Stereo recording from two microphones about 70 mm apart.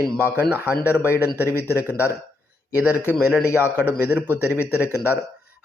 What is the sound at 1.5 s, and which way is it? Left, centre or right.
Speech, left.